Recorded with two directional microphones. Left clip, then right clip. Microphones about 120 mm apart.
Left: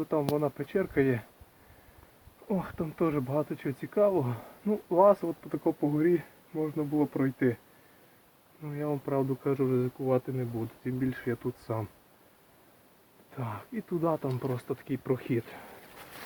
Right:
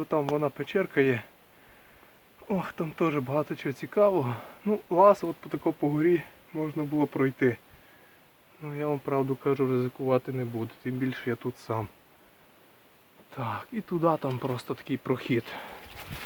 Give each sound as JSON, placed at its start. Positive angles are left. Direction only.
{"t": 0.0, "sound": "speech", "side_deg": -25}
{"t": 2.5, "sound": "speech", "side_deg": -25}
{"t": 8.6, "sound": "speech", "side_deg": -30}
{"t": 13.3, "sound": "speech", "side_deg": -35}